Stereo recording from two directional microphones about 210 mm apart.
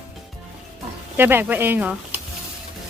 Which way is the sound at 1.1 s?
10° right (ahead or behind).